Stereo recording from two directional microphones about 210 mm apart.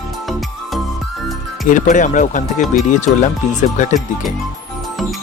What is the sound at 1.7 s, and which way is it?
Speech, 35° left (ahead or behind).